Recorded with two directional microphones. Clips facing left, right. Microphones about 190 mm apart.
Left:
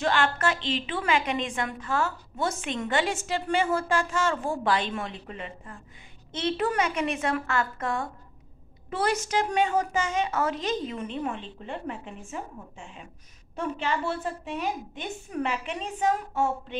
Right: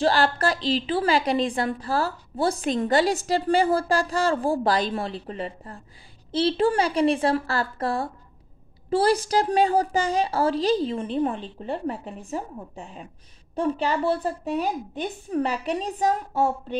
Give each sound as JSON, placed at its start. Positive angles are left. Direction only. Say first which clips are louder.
{"t": 0.0, "sound": "a woman's voice", "louder": "right 4 dB", "side_deg": -35}